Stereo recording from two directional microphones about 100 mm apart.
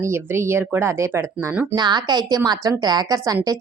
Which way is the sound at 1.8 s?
45° right (ahead or behind).